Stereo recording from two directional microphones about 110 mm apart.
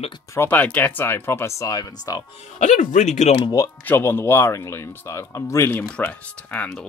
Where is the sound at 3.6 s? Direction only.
20° left (ahead or behind).